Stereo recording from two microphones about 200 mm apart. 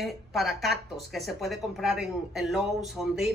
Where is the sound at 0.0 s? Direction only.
Centre (ahead or behind).